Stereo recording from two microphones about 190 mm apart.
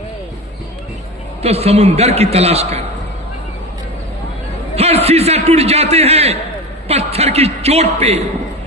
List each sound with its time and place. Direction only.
1.4 s a man's voice: 35° right (ahead or behind)
4.7 s a man's voice: 35° right (ahead or behind)